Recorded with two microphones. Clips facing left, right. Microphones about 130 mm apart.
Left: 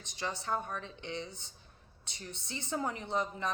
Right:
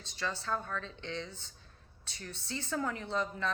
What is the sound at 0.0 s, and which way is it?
A woman's voice, 15° left (ahead or behind).